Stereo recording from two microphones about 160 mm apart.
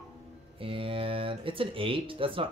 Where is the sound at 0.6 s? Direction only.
35° right (ahead or behind).